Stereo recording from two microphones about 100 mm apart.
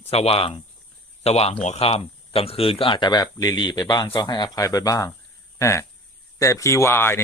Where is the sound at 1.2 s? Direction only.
90° left; by 7.2 s 25° left (ahead or behind).